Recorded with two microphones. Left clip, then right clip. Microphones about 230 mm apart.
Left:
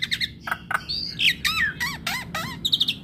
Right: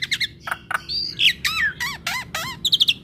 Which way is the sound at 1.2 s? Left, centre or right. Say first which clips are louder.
Right 2 dB; centre.